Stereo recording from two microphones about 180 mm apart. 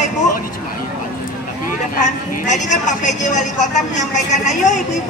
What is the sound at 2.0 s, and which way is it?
A woman's voice, 40° left (ahead or behind).